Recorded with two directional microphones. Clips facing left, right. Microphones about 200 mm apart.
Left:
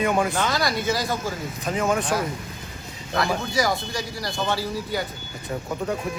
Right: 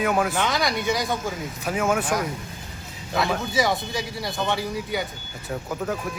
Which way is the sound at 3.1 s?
Centre (ahead or behind).